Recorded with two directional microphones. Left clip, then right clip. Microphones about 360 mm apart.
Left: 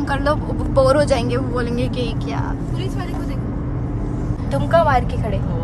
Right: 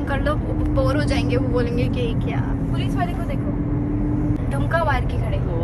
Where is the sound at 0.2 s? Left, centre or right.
Centre.